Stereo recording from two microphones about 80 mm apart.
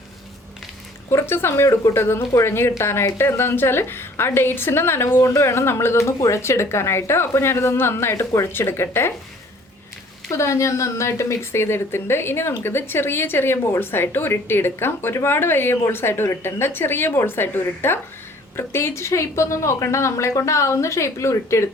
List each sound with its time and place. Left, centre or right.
1.1 s a woman's voice: left
10.3 s a woman's voice: left